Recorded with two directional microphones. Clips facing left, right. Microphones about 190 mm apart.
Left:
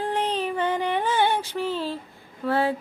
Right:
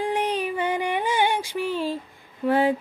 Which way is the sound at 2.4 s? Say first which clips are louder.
Right 3 dB; 15° right (ahead or behind).